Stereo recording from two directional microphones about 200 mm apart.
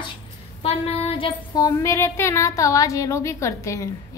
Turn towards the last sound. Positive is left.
turn(degrees=15)  # may be behind; listen again after turning